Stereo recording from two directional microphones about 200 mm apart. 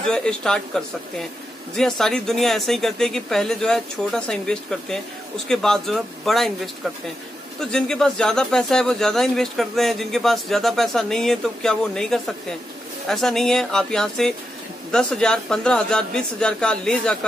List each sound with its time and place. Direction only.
0.0 s speech: 5° left (ahead or behind)
7.7 s speech: 5° left (ahead or behind)